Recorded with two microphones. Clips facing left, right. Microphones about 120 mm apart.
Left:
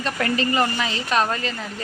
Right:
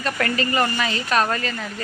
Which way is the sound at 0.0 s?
25° left (ahead or behind).